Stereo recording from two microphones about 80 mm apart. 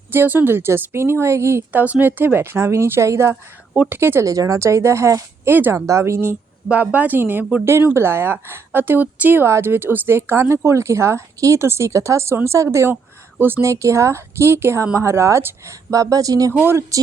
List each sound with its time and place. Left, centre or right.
0.1 s a woman's voice: right
1.8 s a woman's voice: right
4.3 s a woman's voice: right
6.7 s a woman's voice: centre; by 16.5 s right
16.5 s a woman's voice: right